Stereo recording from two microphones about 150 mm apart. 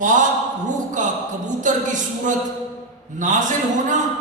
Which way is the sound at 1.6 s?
55° right (ahead or behind).